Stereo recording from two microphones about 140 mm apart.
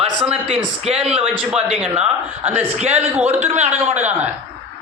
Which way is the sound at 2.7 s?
50° right (ahead or behind).